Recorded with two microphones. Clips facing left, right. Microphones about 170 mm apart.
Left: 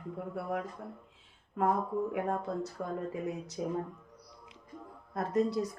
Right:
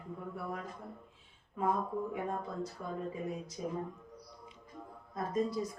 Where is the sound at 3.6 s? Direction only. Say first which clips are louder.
Left 5 dB; 75° left (ahead or behind).